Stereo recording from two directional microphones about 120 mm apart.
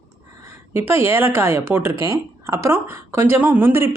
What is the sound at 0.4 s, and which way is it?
Speech, 20° right (ahead or behind).